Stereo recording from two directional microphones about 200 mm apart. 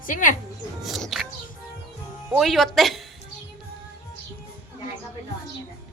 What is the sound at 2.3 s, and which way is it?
Speech, centre (ahead or behind).